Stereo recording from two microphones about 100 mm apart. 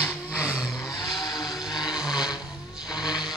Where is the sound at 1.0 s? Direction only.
45° left (ahead or behind).